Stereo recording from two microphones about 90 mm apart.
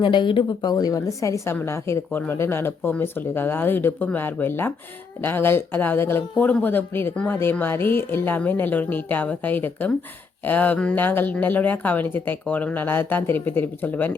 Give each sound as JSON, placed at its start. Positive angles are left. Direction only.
{"t": 0.0, "sound": "speech", "side_deg": 65}
{"t": 0.7, "sound": "a woman's voice", "side_deg": 45}
{"t": 6.3, "sound": "speech", "side_deg": 15}